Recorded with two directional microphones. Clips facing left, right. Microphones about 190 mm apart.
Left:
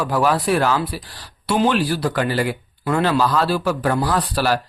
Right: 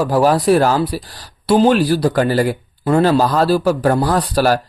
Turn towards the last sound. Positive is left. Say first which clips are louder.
# right 5 dB
turn(degrees=-45)  # may be behind; listen again after turning